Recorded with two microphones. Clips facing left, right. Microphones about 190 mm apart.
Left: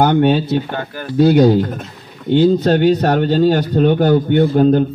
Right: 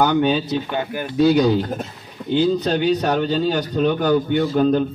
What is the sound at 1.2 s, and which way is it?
Speech, 60° left (ahead or behind).